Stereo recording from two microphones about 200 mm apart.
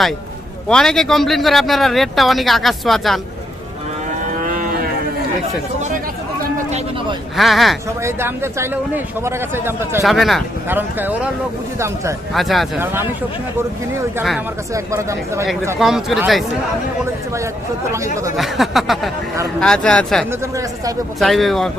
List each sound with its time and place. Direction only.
0.7 s speech: 5° left (ahead or behind)
4.4 s moo: 45° right (ahead or behind)
6.4 s a sound: 35° right (ahead or behind)
7.3 s speech: centre (ahead or behind)
8.0 s speech: 15° right (ahead or behind)
10.0 s speech: centre (ahead or behind)
12.3 s speech: centre (ahead or behind)
12.8 s speech: 10° right (ahead or behind)
14.2 s speech: 5° right (ahead or behind)
15.8 s speech: centre (ahead or behind)
17.9 s speech: 15° right (ahead or behind)
18.3 s speech: centre (ahead or behind)
20.4 s speech: 15° right (ahead or behind)
21.2 s speech: centre (ahead or behind)